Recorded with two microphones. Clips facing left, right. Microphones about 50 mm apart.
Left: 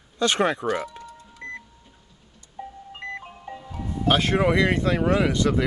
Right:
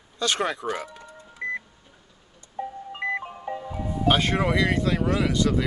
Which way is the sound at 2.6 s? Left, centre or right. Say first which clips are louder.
Right 6 dB; right.